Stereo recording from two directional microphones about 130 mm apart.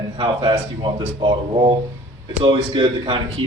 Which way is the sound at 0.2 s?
35° right (ahead or behind).